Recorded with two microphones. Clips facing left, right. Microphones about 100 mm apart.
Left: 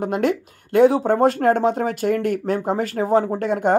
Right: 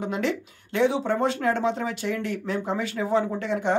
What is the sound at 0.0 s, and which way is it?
Speech, 50° left (ahead or behind).